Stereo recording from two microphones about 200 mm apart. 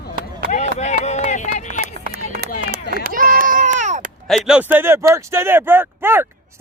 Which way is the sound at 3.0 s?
45° right (ahead or behind).